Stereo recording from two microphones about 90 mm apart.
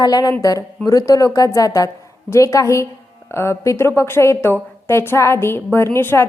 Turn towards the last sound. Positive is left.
turn(degrees=25)  # may be behind; listen again after turning